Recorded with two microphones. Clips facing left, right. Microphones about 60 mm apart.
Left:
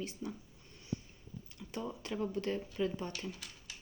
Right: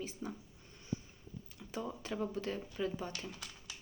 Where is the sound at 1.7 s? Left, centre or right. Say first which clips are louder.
Even; centre.